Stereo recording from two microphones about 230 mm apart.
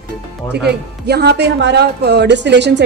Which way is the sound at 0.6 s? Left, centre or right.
Right.